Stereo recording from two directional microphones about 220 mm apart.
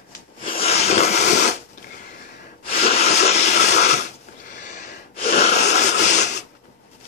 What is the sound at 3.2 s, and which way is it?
Vehicle, 30° left (ahead or behind).